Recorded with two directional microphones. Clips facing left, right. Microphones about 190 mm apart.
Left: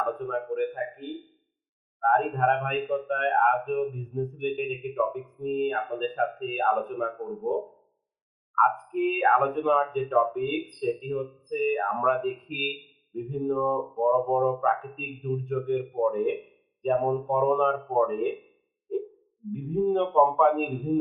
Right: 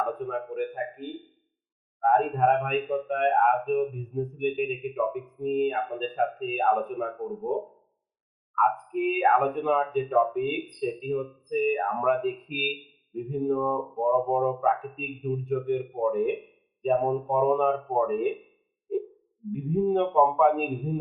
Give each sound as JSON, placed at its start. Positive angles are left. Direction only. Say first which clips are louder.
{"t": 0.2, "sound": "a sound", "louder": "left 2 dB", "side_deg": -5}
{"t": 2.0, "sound": "speech", "louder": "right 2 dB", "side_deg": -5}
{"t": 8.5, "sound": "speech", "louder": "even", "side_deg": -5}
{"t": 19.5, "sound": "speech", "louder": "even", "side_deg": -5}